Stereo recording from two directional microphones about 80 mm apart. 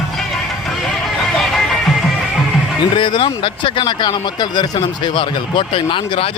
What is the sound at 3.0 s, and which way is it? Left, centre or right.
Speech, left.